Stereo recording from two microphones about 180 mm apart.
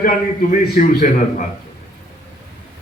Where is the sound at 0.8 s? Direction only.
45° left (ahead or behind).